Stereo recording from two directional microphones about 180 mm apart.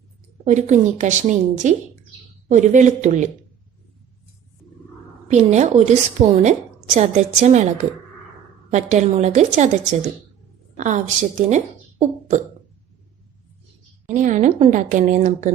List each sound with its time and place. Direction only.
0.4 s a woman's voice: 40° right (ahead or behind)
5.3 s a woman's voice: 40° right (ahead or behind)
8.7 s a woman's voice: 40° right (ahead or behind)
10.8 s speech: 45° right (ahead or behind)
14.1 s a woman's voice: 45° right (ahead or behind)